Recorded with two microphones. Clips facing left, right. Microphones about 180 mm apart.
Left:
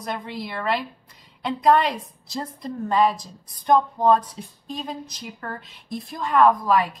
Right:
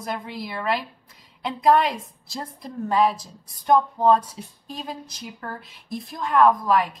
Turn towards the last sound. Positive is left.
turn(degrees=0)  # may be behind; listen again after turning